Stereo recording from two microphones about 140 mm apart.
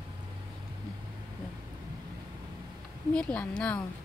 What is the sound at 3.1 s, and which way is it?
Speech, 10° left (ahead or behind).